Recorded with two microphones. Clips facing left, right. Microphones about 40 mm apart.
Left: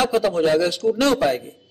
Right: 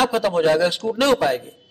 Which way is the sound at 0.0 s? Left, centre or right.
Centre.